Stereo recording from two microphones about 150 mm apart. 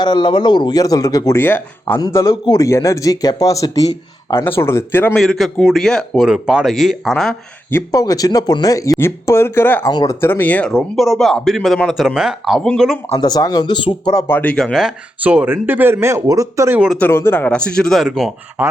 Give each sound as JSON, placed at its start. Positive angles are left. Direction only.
{"t": 0.0, "sound": "speech", "side_deg": 30}
{"t": 5.1, "sound": "speech", "side_deg": 0}
{"t": 7.7, "sound": "speech", "side_deg": 20}
{"t": 9.9, "sound": "speech", "side_deg": 30}
{"t": 10.2, "sound": "speech", "side_deg": 15}
{"t": 13.1, "sound": "speech", "side_deg": 25}
{"t": 17.0, "sound": "speech", "side_deg": 15}